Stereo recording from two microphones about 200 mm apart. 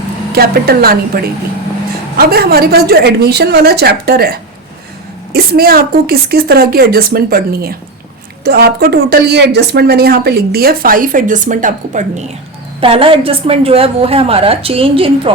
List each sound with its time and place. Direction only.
0.3 s speech: 50° right (ahead or behind)
12.8 s a woman's voice: 25° right (ahead or behind)